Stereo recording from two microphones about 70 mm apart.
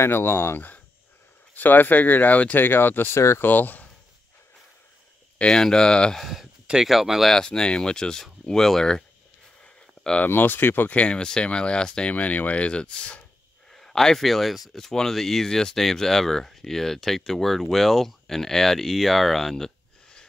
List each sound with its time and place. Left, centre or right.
0.0 s speech: left
3.2 s speech: left
3.4 s speech: left
5.4 s speech: centre
6.2 s speech: centre
9.6 s a sound: centre
10.3 s speech: left
13.7 s speech: centre